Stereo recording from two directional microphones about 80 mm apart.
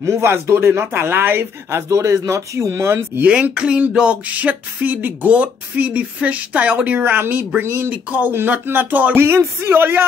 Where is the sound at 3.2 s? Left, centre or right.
Centre.